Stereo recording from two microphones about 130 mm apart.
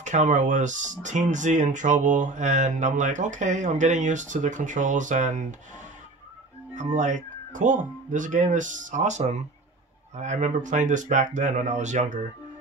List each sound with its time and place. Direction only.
0.0 s speech: 70° right (ahead or behind)
6.7 s speech: 70° right (ahead or behind)